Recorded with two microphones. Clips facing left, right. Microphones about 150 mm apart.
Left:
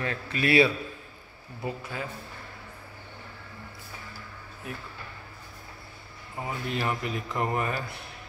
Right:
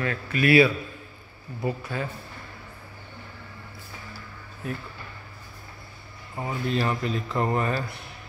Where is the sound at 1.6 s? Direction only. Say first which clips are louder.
Right 5 dB; 15° left (ahead or behind).